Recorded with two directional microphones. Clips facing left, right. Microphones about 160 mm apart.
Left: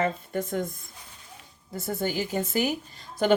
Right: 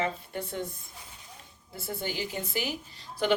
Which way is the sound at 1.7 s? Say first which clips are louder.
Left 6 dB; 45° left (ahead or behind).